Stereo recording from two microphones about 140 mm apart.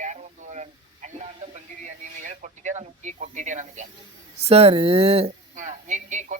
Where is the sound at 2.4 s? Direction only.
60° right (ahead or behind).